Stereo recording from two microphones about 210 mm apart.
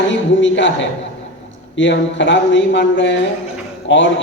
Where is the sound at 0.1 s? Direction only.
60° left (ahead or behind).